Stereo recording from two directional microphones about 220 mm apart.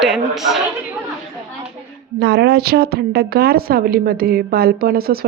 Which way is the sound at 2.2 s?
50° right (ahead or behind).